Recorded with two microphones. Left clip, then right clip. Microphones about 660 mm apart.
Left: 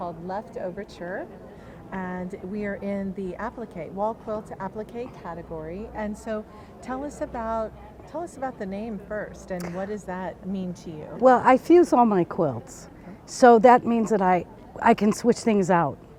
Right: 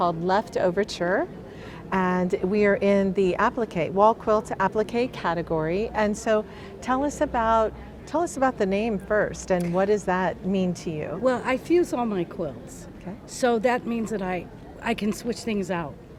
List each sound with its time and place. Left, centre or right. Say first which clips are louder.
0.0 s a woman's voice: right 9 dB; right
11.2 s a woman's voice: left 8 dB; left